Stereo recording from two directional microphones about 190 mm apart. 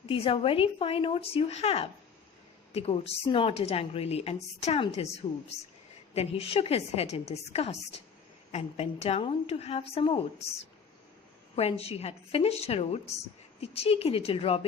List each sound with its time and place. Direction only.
0.0 s a woman's voice: 30° left (ahead or behind)
6.1 s a woman's voice: 30° left (ahead or behind)
11.5 s a woman's voice: 30° left (ahead or behind)